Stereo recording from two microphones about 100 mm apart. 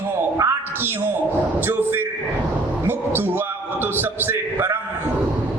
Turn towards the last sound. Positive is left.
turn(degrees=-20)  # may be behind; listen again after turning